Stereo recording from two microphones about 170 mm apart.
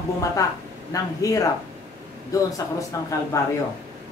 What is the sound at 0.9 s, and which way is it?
Speech, 20° left (ahead or behind).